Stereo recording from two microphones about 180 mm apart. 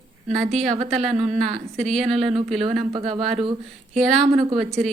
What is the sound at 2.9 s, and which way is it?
Speech, 35° right (ahead or behind).